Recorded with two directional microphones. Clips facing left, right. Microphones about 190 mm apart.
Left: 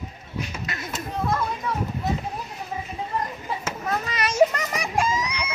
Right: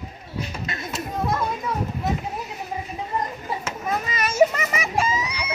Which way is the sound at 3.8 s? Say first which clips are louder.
Right 1 dB; 10° right (ahead or behind).